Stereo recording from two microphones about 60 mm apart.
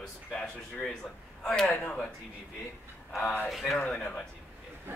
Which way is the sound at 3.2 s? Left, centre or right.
Left.